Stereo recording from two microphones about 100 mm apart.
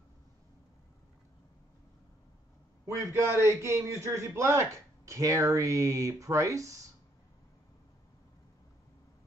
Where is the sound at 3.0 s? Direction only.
25° right (ahead or behind).